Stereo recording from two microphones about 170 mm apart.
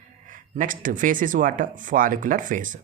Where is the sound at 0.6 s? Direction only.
50° right (ahead or behind).